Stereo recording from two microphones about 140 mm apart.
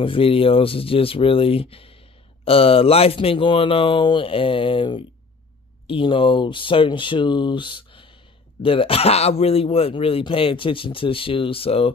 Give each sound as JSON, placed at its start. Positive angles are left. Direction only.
{"t": 0.0, "sound": "speech", "side_deg": 40}